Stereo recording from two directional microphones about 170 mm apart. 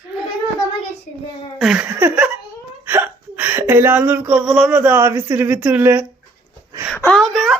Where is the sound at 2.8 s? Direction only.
10° right (ahead or behind).